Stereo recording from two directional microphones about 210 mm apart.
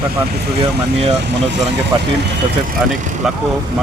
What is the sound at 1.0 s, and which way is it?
Speech, 30° right (ahead or behind).